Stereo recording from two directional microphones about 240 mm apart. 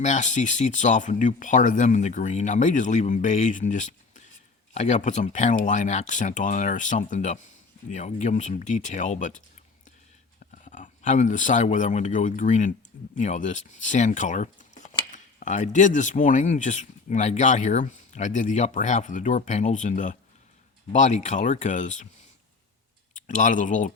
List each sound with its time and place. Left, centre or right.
0.0 s speech: left
10.4 s speech: left
23.2 s speech: left